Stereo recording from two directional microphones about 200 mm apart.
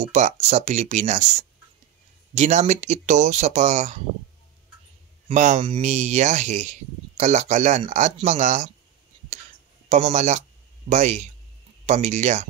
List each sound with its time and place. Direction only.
0.0 s speech: 35° right (ahead or behind)
5.3 s speech: 35° right (ahead or behind)
9.8 s speech: 35° right (ahead or behind)